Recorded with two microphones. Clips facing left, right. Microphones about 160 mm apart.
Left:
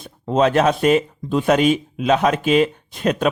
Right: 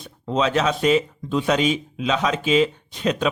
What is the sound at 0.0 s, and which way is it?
Speech, 50° left (ahead or behind).